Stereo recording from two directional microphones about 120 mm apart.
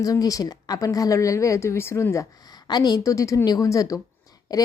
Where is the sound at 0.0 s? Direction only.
30° left (ahead or behind).